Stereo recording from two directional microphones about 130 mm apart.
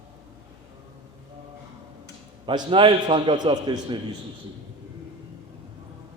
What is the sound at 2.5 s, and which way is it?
A man's voice, 40° right (ahead or behind).